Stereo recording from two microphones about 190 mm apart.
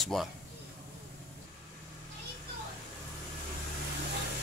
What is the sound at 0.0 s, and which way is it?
Speech, centre (ahead or behind).